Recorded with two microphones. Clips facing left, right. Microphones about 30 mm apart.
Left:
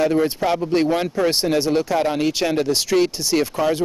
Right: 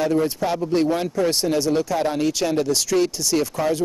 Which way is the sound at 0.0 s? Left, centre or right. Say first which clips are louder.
Left 2 dB; left.